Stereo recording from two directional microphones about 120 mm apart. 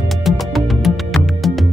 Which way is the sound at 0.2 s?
Centre (ahead or behind).